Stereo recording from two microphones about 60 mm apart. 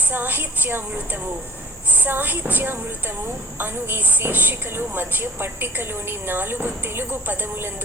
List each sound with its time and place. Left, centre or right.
0.1 s a woman's voice: right
1.9 s a woman's voice: right